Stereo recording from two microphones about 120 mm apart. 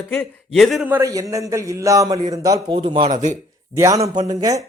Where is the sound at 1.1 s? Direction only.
30° right (ahead or behind).